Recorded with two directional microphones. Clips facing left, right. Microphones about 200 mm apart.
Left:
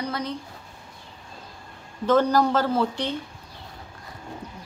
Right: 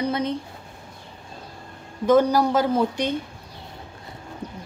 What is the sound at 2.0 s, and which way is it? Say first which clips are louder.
Speech: right 2 dB; 10° right (ahead or behind).